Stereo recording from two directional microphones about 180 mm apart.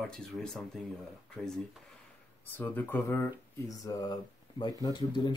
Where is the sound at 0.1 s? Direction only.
5° left (ahead or behind).